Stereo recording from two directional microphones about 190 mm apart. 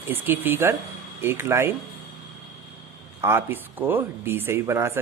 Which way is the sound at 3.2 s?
10° right (ahead or behind).